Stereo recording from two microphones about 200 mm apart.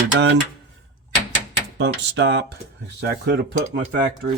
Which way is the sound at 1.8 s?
60° right (ahead or behind).